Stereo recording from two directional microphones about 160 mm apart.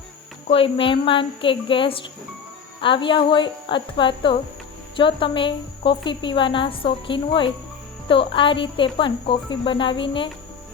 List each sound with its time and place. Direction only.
0.4 s a woman's voice: 35° left (ahead or behind)